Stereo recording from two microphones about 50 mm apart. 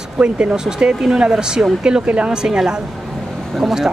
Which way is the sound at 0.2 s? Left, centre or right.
Right.